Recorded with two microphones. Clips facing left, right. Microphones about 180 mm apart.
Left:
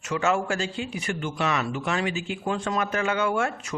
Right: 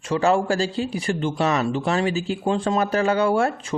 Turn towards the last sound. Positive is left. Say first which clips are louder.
# right 5 dB
turn(degrees=-35)  # may be behind; listen again after turning